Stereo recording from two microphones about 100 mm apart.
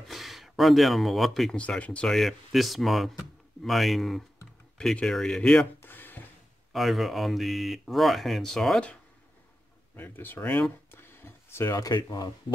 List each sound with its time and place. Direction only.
0.1 s speech: centre (ahead or behind)
1.6 s speech: 10° left (ahead or behind)
5.8 s a sound: 20° left (ahead or behind)
6.7 s speech: centre (ahead or behind)
9.9 s speech: 20° left (ahead or behind)
10.9 s a sound: 25° left (ahead or behind)
11.7 s speech: 40° left (ahead or behind)